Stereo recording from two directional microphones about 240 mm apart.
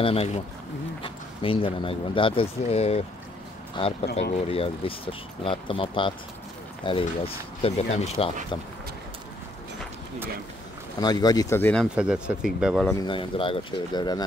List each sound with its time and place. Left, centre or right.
0.0 s speech: left
11.0 s speech: centre
12.9 s speech: centre